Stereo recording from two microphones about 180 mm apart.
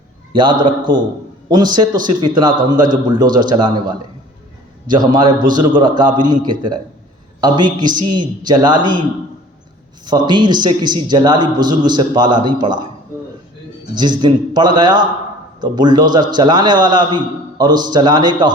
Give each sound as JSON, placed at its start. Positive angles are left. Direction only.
{"t": 0.3, "sound": "a man's voice", "side_deg": -25}
{"t": 10.1, "sound": "a man's voice", "side_deg": -25}
{"t": 13.9, "sound": "a man's voice", "side_deg": -25}